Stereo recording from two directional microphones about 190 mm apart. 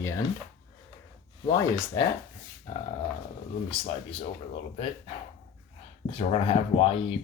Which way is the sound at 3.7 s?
30° left (ahead or behind).